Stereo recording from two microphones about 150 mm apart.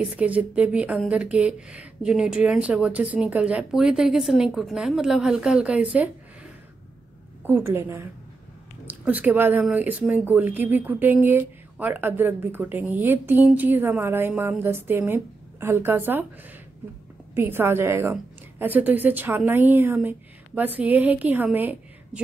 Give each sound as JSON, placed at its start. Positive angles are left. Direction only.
{"t": 0.0, "sound": "speech", "side_deg": -10}
{"t": 7.4, "sound": "speech", "side_deg": -15}
{"t": 17.4, "sound": "a woman's voice", "side_deg": -15}